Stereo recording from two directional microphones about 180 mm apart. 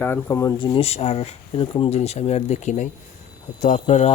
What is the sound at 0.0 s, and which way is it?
Speech, 15° left (ahead or behind).